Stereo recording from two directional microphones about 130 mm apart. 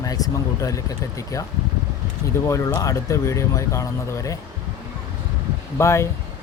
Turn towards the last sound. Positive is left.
turn(degrees=20)  # may be behind; listen again after turning